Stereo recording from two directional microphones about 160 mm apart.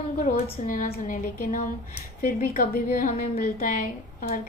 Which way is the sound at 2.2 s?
60° left (ahead or behind).